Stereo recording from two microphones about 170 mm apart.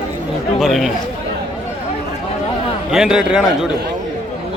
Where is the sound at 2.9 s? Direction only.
5° right (ahead or behind).